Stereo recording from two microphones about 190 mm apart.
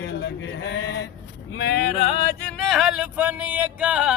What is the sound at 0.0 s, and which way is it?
Sheep, 65° left (ahead or behind).